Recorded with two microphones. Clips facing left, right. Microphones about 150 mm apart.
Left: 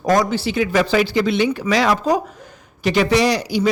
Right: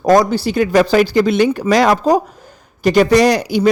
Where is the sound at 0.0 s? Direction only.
35° right (ahead or behind).